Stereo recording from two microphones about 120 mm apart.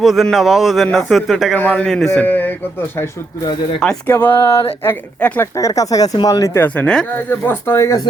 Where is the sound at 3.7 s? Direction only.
5° left (ahead or behind).